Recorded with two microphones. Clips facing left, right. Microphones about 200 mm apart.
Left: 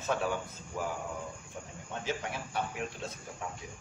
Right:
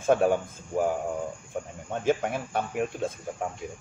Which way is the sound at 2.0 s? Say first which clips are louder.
Right 11 dB; 50° right (ahead or behind).